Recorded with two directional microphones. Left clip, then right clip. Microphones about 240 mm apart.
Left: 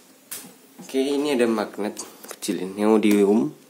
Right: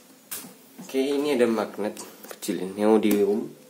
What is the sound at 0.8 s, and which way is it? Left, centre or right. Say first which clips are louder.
Speech: left 2 dB; centre.